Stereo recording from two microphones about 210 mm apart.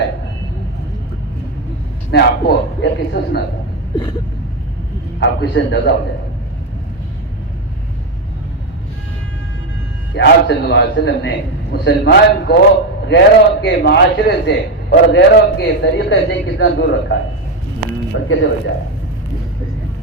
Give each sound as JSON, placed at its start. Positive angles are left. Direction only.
{"t": 2.0, "sound": "a man's voice", "side_deg": 55}
{"t": 5.2, "sound": "a man's voice", "side_deg": 55}
{"t": 10.2, "sound": "a man's voice", "side_deg": 50}